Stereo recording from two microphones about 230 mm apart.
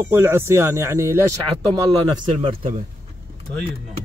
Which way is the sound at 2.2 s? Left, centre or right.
Right.